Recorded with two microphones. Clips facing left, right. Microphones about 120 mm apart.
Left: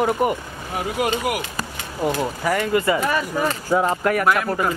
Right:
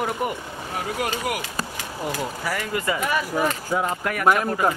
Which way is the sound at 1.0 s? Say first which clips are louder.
Left 6 dB; 10° left (ahead or behind).